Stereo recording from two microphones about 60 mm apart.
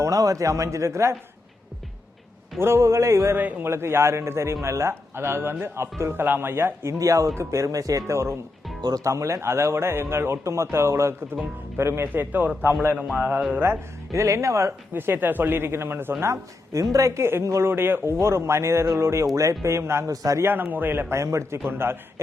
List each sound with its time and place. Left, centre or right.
0.0 s a man's voice: right
2.6 s speech: right
7.0 s a man's voice: right
14.1 s a man's voice: right
14.9 s speech: right
16.2 s a man's voice: right
17.7 s speech: right
20.1 s speech: right
20.4 s speech: right
21.2 s speech: right
21.6 s speech: right